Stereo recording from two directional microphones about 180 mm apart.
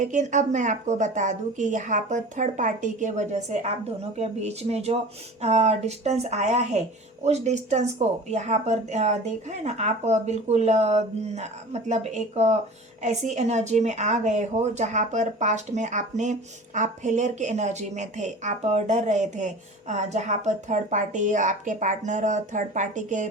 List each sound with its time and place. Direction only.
0.0 s a woman's voice: 45° right (ahead or behind)